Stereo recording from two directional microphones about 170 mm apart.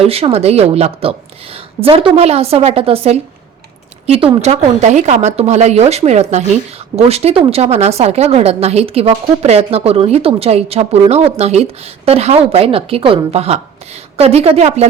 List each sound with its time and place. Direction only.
0.0 s a woman's voice: 35° right (ahead or behind)